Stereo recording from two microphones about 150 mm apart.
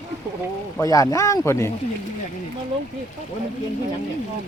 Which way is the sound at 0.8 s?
20° left (ahead or behind).